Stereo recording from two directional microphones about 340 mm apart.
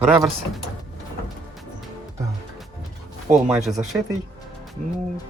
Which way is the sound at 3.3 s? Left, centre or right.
Centre.